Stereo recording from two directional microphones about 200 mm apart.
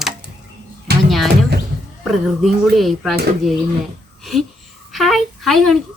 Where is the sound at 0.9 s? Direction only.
55° right (ahead or behind).